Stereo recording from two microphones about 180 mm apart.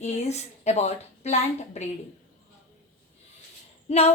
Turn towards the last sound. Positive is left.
turn(degrees=35)  # may be behind; listen again after turning